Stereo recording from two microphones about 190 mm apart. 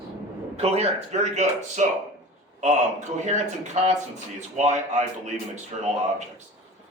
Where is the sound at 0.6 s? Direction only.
35° right (ahead or behind).